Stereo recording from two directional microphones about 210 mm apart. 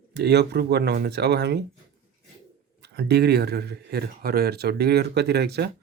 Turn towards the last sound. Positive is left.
turn(degrees=-50)  # may be behind; listen again after turning